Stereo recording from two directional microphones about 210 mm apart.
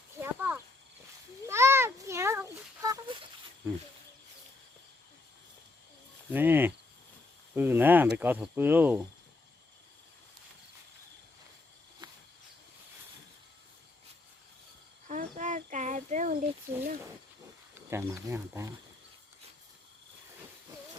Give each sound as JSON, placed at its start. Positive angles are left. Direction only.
{"t": 0.2, "sound": "a sound", "side_deg": -10}
{"t": 6.3, "sound": "speech", "side_deg": -10}
{"t": 7.5, "sound": "cricket", "side_deg": -10}
{"t": 8.1, "sound": "speech", "side_deg": -10}
{"t": 15.0, "sound": "a sound", "side_deg": -35}
{"t": 17.7, "sound": "speech", "side_deg": -10}